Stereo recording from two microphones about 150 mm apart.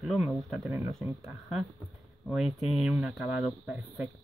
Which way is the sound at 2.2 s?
Centre (ahead or behind).